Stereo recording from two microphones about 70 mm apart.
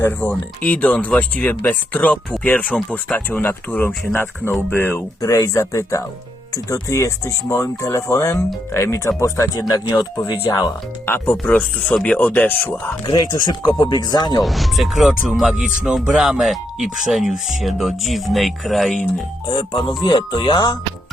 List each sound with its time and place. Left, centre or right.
0.0 s speech: left
5.2 s speech: left
9.6 s speech: left
11.0 s speech: left
13.1 s speech: left
14.4 s speech: centre
19.5 s speech: left